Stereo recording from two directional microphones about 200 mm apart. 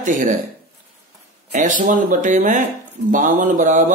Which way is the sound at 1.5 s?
40° right (ahead or behind).